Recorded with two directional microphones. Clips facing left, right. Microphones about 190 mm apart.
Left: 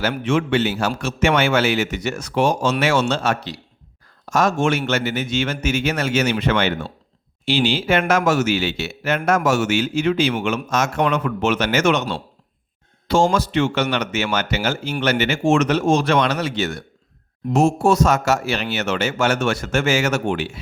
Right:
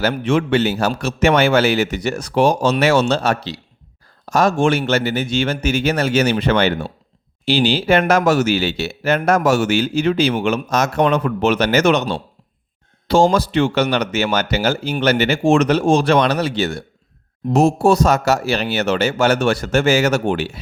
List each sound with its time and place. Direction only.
0.0 s speech: 35° right (ahead or behind)
13.3 s speech: 35° right (ahead or behind)